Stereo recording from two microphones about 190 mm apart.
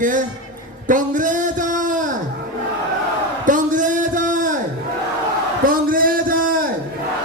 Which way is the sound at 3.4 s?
45° right (ahead or behind).